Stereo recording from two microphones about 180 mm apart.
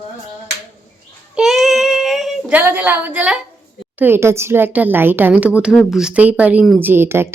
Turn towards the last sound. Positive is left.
turn(degrees=-15)  # may be behind; listen again after turning